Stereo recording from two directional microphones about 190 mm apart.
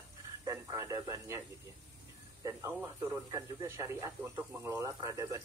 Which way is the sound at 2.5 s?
15° right (ahead or behind).